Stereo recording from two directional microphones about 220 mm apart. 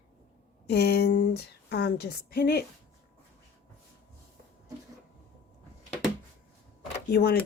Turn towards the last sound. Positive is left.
turn(degrees=45)  # may be behind; listen again after turning